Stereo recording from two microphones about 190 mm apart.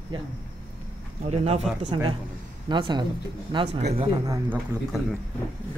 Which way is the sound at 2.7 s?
25° right (ahead or behind).